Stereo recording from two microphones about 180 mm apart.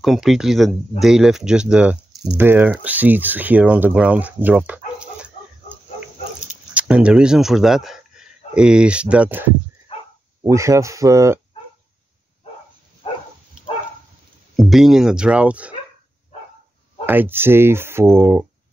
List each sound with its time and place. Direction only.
0.0 s speech: centre (ahead or behind)
6.7 s speech: 5° right (ahead or behind)
14.6 s speech: centre (ahead or behind)
17.0 s speech: 10° right (ahead or behind)